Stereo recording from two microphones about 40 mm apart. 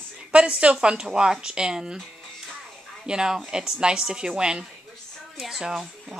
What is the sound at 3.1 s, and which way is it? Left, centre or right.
Speech, centre.